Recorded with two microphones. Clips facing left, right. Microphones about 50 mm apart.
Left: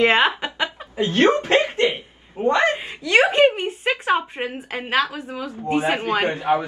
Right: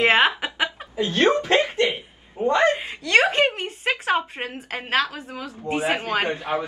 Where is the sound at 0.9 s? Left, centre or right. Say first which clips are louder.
Left 3 dB; left.